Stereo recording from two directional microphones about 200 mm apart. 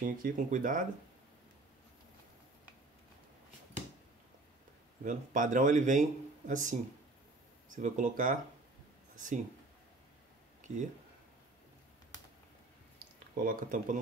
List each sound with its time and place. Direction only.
0.2 s speech: 40° right (ahead or behind)
5.0 s speech: 40° right (ahead or behind)
10.7 s speech: 35° right (ahead or behind)
13.4 s speech: 45° right (ahead or behind)